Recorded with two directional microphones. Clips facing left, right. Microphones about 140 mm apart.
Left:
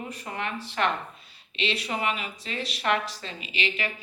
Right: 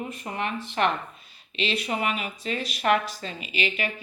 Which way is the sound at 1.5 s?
30° left (ahead or behind).